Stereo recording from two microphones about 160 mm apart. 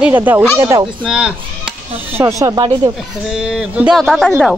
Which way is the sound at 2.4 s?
25° right (ahead or behind).